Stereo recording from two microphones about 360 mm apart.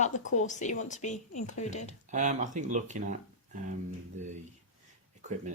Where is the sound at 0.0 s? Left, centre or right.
Centre.